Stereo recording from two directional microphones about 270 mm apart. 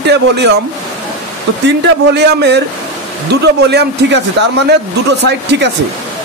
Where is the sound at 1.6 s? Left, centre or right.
Right.